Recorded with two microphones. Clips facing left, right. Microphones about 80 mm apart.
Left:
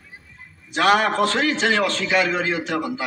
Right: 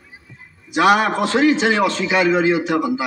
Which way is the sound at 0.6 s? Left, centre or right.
Centre.